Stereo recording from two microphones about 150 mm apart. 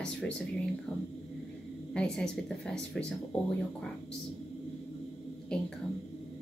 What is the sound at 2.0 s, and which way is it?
Speech, 5° left (ahead or behind).